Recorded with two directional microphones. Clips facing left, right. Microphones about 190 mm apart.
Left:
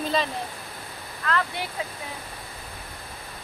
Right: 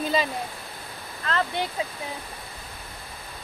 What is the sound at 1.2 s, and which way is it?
Speech, 25° right (ahead or behind).